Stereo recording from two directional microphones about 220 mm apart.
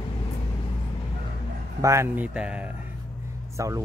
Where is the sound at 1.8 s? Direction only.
15° right (ahead or behind).